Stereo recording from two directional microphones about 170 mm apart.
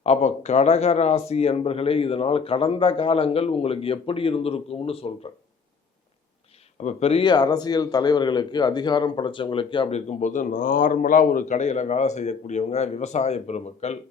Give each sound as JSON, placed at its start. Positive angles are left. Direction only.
{"t": 0.0, "sound": "a man's voice", "side_deg": 40}
{"t": 6.8, "sound": "a man's voice", "side_deg": 35}
{"t": 10.1, "sound": "a man's voice", "side_deg": 45}